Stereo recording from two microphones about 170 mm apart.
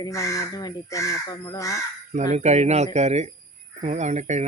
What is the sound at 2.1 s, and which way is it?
Speech, 45° right (ahead or behind).